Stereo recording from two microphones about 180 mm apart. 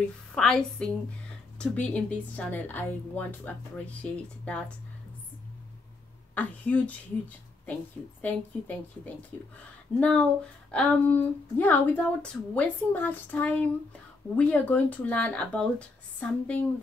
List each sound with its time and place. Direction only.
0.3 s a woman's voice: 5° left (ahead or behind)
6.3 s a woman's voice: 10° left (ahead or behind)
8.2 s a woman's voice: 10° left (ahead or behind)